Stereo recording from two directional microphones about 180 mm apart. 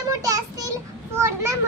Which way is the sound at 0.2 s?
20° right (ahead or behind).